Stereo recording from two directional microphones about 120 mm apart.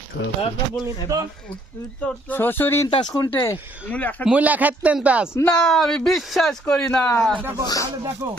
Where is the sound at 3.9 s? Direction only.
15° left (ahead or behind).